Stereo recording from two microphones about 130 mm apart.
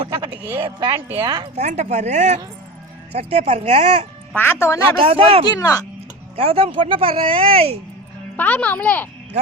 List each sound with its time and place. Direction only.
0.6 s speech: 35° right (ahead or behind)
0.9 s a woman's voice: 20° right (ahead or behind)
1.5 s speech: 60° right (ahead or behind)
4.4 s a man's voice: 15° left (ahead or behind)
4.9 s speech: 45° right (ahead or behind)
5.5 s a man's voice: 25° left (ahead or behind)
6.3 s speech: 50° right (ahead or behind)
8.4 s a child's voice: 10° left (ahead or behind)